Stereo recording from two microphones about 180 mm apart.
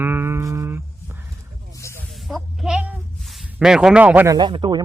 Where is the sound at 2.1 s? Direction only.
Centre (ahead or behind).